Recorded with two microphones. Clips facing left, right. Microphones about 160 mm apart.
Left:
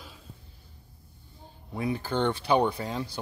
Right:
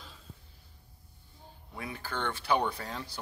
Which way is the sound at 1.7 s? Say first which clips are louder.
Left 9 dB; 25° left (ahead or behind).